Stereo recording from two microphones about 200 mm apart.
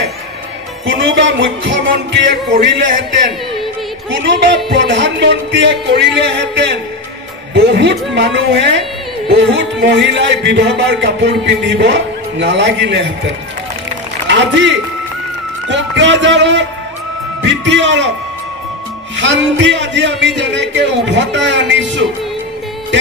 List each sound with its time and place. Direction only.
0.8 s a man's voice: 65° right (ahead or behind)
2.5 s a man's voice: 40° right (ahead or behind)
4.2 s a man's voice: 60° right (ahead or behind)
14.2 s a man's voice: 60° right (ahead or behind)
19.1 s a man's voice: 65° right (ahead or behind)